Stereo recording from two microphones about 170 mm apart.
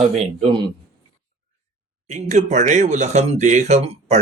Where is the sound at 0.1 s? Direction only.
40° right (ahead or behind).